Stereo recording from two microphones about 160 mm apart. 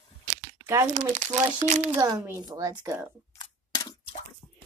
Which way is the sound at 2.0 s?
25° right (ahead or behind).